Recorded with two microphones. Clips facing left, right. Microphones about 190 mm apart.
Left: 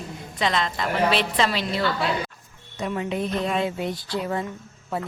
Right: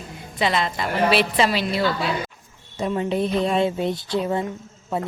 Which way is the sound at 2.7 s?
30° right (ahead or behind).